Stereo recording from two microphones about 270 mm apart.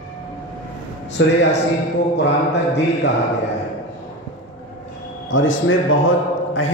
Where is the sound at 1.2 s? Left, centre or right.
Left.